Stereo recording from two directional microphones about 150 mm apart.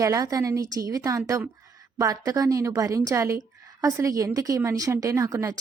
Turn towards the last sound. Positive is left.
turn(degrees=-20)  # may be behind; listen again after turning